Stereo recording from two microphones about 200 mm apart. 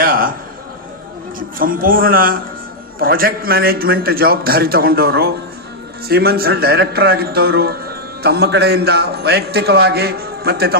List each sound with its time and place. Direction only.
1.4 s a man's voice: 45° right (ahead or behind)